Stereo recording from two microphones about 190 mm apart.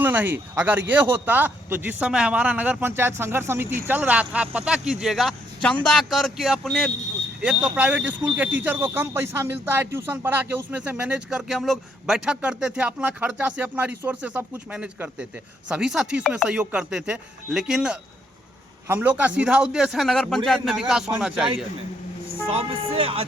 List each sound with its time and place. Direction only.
0.0 s a man's voice: 10° right (ahead or behind)
22.4 s speech: 30° right (ahead or behind)